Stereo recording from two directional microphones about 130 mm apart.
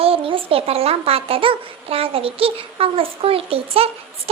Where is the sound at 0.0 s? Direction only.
45° right (ahead or behind).